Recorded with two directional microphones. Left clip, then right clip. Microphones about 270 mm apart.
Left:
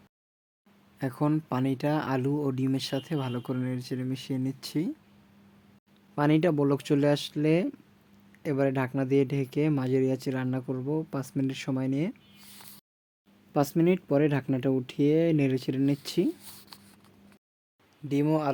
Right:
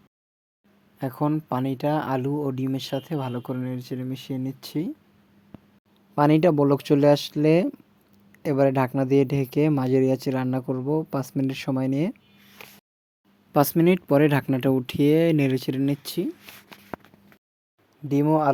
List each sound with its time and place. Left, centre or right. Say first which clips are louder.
0.9 s speech: right 3 dB; centre
6.1 s speech: right 6 dB; centre
13.5 s speech: right 5 dB; right; by 16.3 s centre
18.1 s speech: right 6 dB; centre